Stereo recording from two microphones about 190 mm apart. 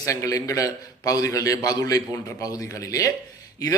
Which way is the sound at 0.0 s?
15° left (ahead or behind).